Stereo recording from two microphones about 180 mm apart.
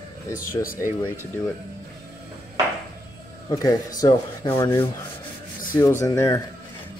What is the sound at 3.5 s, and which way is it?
Speech, 20° left (ahead or behind).